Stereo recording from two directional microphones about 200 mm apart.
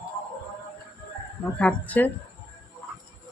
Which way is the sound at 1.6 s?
5° left (ahead or behind).